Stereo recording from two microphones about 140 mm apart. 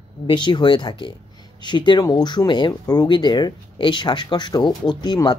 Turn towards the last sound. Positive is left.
turn(degrees=30)  # may be behind; listen again after turning